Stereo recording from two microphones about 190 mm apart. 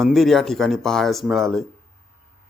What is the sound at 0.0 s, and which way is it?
A man's voice, centre (ahead or behind).